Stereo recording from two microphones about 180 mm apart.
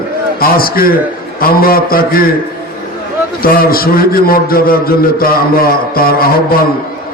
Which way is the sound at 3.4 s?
55° left (ahead or behind).